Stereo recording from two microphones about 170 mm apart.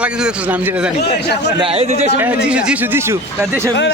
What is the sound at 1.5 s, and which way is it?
Speech, 35° right (ahead or behind).